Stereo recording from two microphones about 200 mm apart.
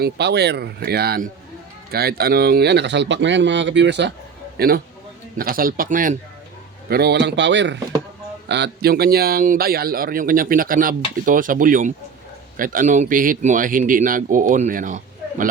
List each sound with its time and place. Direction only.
0.0 s speech: 55° right (ahead or behind)
4.5 s a man's voice: 50° right (ahead or behind)
6.8 s a man's voice: 55° right (ahead or behind)